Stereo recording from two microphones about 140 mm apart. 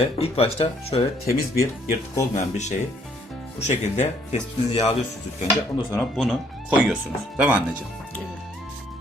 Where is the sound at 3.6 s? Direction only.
55° left (ahead or behind).